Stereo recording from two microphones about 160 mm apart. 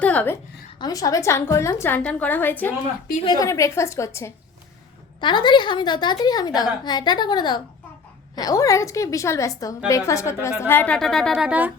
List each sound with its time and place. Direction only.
0.0 s a sound: 10° left (ahead or behind)
0.8 s a woman's voice: 20° left (ahead or behind)
5.2 s a woman's voice: 30° left (ahead or behind); by 11.7 s 5° right (ahead or behind)